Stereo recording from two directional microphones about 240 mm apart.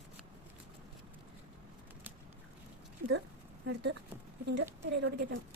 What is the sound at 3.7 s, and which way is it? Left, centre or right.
Speech, right.